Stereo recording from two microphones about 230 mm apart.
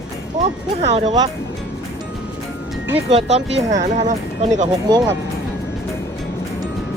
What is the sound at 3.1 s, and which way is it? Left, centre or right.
Speech, right.